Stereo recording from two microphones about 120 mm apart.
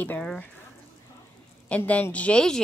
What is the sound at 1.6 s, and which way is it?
Speech, 10° left (ahead or behind).